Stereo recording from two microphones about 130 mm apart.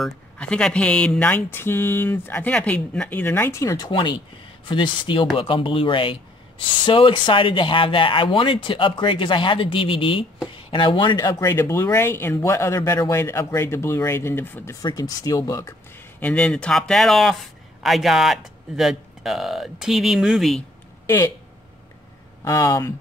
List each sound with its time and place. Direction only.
0.0 s speech: 5° left (ahead or behind)
14.8 s speech: 30° left (ahead or behind)
16.2 s speech: 10° left (ahead or behind)
22.4 s speech: 25° left (ahead or behind)